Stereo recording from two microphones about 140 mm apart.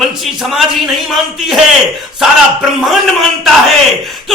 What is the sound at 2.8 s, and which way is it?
Speech, centre (ahead or behind).